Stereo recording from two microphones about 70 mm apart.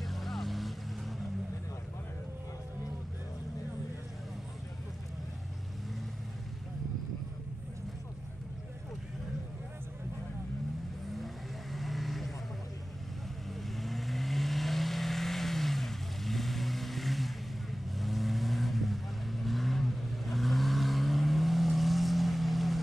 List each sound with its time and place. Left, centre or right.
0.0 s vehicle: centre
11.7 s vehicle: centre
13.5 s vehicle: centre